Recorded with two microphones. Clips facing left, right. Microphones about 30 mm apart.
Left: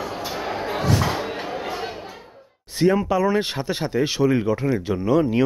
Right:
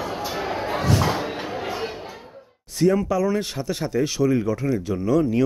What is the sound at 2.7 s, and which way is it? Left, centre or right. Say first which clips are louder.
Speech: left 1 dB; left.